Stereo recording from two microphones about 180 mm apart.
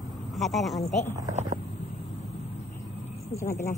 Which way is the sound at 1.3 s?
40° right (ahead or behind).